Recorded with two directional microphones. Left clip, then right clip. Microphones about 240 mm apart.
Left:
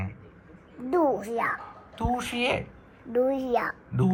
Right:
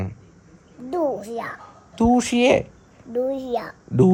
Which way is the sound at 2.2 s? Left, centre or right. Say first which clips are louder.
Right 10 dB; right.